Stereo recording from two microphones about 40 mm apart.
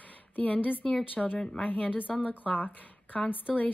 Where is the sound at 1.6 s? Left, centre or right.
Left.